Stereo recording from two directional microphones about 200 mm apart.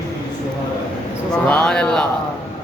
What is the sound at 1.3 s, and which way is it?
Speech, 5° left (ahead or behind).